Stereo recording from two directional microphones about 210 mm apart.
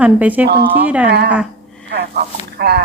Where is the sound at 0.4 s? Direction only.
50° right (ahead or behind).